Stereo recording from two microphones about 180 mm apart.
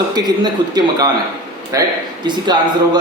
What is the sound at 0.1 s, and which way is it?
A man's voice, 20° right (ahead or behind).